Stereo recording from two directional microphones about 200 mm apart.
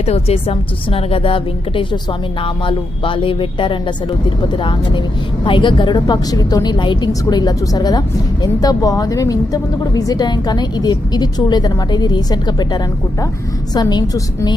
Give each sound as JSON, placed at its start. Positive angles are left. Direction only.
{"t": 0.0, "sound": "a woman's voice", "side_deg": 30}